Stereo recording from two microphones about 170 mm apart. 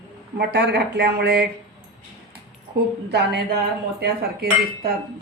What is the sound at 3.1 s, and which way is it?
Speech, 80° right.